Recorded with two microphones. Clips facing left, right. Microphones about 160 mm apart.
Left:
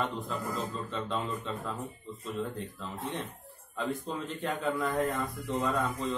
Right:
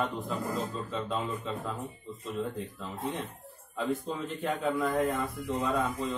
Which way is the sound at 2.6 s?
Centre (ahead or behind).